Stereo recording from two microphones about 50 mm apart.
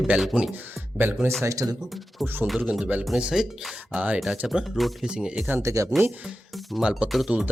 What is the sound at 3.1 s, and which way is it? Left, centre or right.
Speech, centre.